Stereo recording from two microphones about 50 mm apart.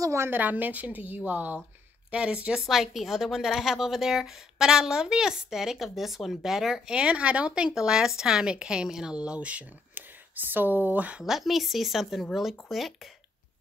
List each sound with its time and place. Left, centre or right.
0.3 s a woman's voice: right
2.0 s speech: right
2.6 s a woman's voice: centre
7.0 s a woman's voice: right
11.2 s speech: centre